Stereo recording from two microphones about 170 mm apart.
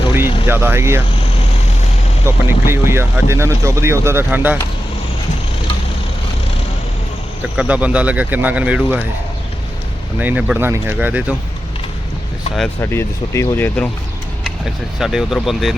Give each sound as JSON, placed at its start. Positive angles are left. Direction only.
{"t": 0.1, "sound": "vehicle", "side_deg": -15}
{"t": 2.2, "sound": "speech", "side_deg": -15}
{"t": 7.4, "sound": "speech", "side_deg": -5}
{"t": 10.2, "sound": "speech", "side_deg": -10}
{"t": 12.8, "sound": "speech", "side_deg": 15}
{"t": 14.9, "sound": "speech", "side_deg": 0}